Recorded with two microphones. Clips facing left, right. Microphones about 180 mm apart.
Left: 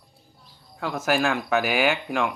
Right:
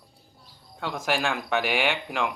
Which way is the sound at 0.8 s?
5° left (ahead or behind).